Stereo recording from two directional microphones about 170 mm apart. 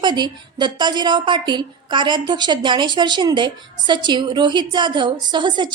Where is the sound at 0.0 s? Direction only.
25° right (ahead or behind).